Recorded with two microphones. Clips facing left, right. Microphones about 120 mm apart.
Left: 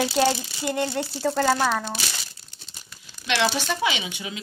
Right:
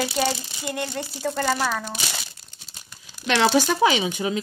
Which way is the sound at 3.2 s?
45° right (ahead or behind).